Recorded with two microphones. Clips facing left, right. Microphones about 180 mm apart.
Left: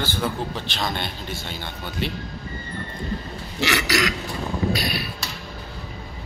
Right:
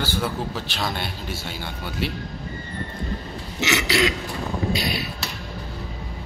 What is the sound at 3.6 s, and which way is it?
Burping, 25° right (ahead or behind).